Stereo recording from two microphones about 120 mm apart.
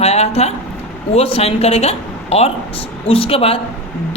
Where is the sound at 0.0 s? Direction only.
60° left (ahead or behind).